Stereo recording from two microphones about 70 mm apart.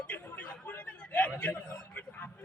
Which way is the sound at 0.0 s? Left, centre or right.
Left.